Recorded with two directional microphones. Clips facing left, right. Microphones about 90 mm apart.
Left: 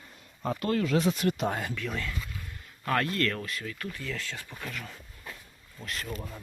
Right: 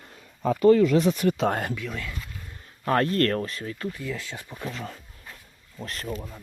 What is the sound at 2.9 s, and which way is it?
Speech, 35° right (ahead or behind).